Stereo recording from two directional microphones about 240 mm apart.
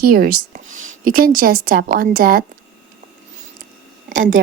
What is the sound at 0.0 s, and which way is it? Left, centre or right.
A woman's voice, right.